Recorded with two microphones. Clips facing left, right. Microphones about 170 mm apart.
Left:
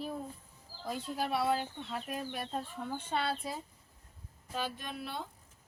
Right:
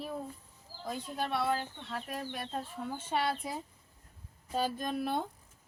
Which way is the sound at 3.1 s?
15° right (ahead or behind).